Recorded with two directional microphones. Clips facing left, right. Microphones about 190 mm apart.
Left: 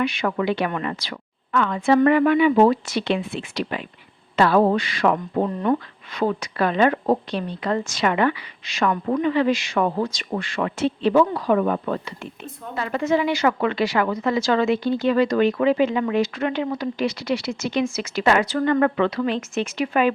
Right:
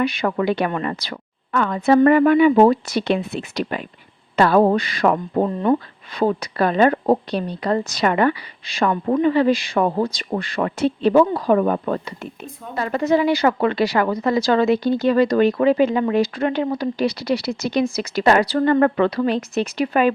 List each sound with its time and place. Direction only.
0.0 s a woman's voice: 35° right (ahead or behind)